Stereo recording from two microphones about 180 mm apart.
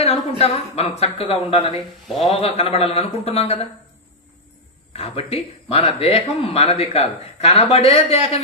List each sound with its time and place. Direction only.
0.4 s speech: 35° left (ahead or behind)
4.9 s speech: 35° left (ahead or behind)